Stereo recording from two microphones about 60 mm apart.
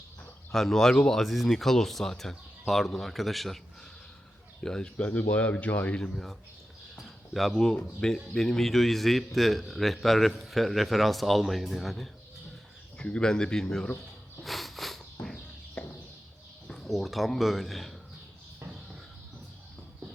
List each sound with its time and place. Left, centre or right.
0.5 s speech: centre
1.2 s speech: centre
4.6 s speech: centre
4.9 s speech: left
6.0 s speech: centre
7.7 s speech: centre
13.0 s speech: centre
14.4 s a sound: centre
15.8 s a sound: centre
16.8 s speech: centre